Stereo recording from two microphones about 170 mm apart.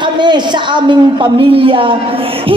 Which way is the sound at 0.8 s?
30° right (ahead or behind).